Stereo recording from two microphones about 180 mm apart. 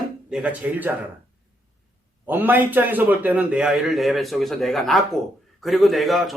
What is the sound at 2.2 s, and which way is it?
A man's voice, 10° right (ahead or behind).